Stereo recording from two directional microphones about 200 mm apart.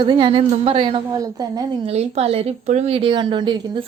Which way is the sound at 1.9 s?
30° right (ahead or behind).